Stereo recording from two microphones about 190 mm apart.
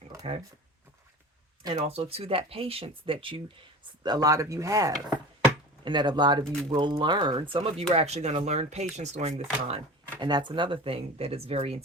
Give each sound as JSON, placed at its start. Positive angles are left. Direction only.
{"t": 1.6, "sound": "speech", "side_deg": -25}
{"t": 4.0, "sound": "chopping", "side_deg": -20}
{"t": 5.8, "sound": "speech", "side_deg": -25}